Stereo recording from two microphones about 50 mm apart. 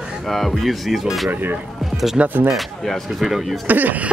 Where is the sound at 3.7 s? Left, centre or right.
Right.